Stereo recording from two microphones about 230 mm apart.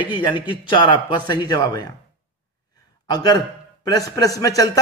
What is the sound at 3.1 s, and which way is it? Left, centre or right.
A man's voice, centre.